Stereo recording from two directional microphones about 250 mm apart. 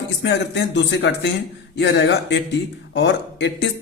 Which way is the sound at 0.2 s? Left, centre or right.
Left.